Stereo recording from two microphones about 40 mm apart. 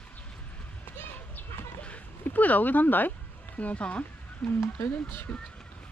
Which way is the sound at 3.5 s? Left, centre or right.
Left.